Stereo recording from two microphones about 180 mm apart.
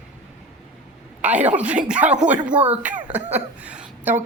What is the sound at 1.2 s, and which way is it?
A woman's voice, 10° right (ahead or behind).